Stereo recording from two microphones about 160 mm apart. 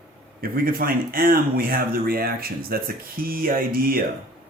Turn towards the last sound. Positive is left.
turn(degrees=-65)  # may be behind; listen again after turning